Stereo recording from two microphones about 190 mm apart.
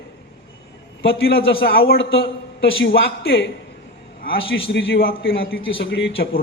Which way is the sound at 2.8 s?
75° left (ahead or behind).